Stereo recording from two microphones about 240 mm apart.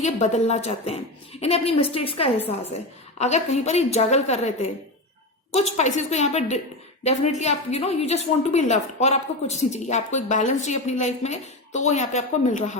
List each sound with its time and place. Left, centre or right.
0.0 s a woman's voice: left
5.5 s a woman's voice: left